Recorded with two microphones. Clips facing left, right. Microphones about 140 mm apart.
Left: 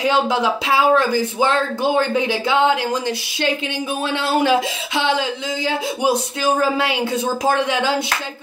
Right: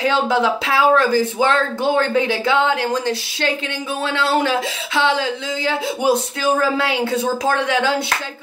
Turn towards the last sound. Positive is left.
turn(degrees=15)  # may be behind; listen again after turning